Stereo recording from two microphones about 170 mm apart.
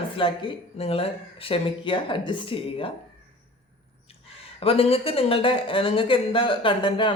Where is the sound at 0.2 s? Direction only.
35° left (ahead or behind).